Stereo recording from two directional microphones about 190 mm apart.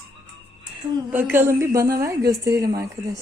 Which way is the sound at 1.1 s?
10° right (ahead or behind).